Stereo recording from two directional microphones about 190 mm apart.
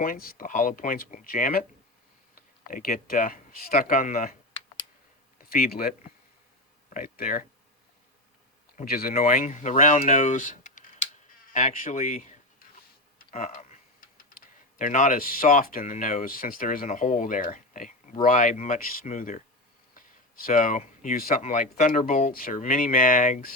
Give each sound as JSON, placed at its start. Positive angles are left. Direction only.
{"t": 0.0, "sound": "speech", "side_deg": 50}
{"t": 5.4, "sound": "speech", "side_deg": 50}
{"t": 6.9, "sound": "speech", "side_deg": 45}
{"t": 8.8, "sound": "speech", "side_deg": 50}
{"t": 14.8, "sound": "speech", "side_deg": 45}